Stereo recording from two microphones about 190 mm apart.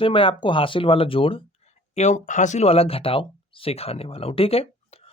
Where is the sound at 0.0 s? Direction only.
25° left (ahead or behind).